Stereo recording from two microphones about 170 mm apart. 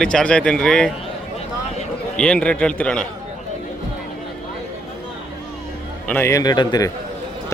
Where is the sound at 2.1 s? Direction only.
5° left (ahead or behind).